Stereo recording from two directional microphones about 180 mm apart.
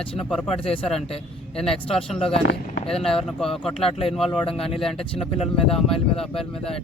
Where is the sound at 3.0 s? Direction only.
5° left (ahead or behind).